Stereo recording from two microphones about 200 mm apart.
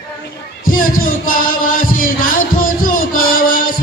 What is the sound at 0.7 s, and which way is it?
Music, 45° left (ahead or behind).